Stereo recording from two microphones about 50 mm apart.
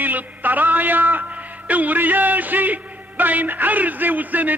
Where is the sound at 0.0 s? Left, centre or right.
Right.